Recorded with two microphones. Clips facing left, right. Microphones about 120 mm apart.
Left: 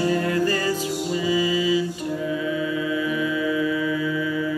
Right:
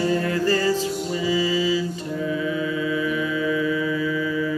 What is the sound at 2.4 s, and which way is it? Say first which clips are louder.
Mantra: even; 35° right (ahead or behind).